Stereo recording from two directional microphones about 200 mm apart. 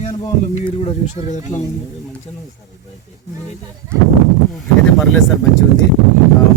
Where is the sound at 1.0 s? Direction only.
35° left (ahead or behind).